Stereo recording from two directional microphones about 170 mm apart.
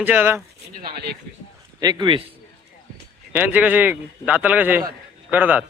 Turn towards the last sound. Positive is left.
turn(degrees=-10)  # may be behind; listen again after turning